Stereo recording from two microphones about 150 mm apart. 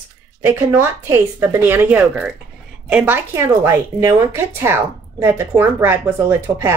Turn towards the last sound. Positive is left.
turn(degrees=-15)  # may be behind; listen again after turning